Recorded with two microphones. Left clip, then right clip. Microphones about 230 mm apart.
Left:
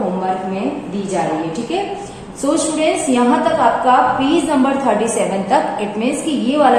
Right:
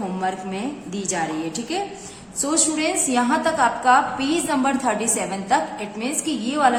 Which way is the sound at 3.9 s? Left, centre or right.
Right.